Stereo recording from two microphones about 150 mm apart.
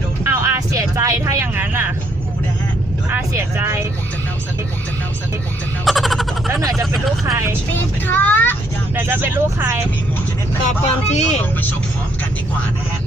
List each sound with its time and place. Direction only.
0.3 s a sound: 20° right (ahead or behind)
3.3 s speech: 20° right (ahead or behind)
5.8 s speech: centre (ahead or behind)
6.5 s speech: 20° right (ahead or behind)
7.7 s speech: 10° left (ahead or behind)
9.0 s speech: 15° right (ahead or behind)
10.7 s speech: 50° left (ahead or behind)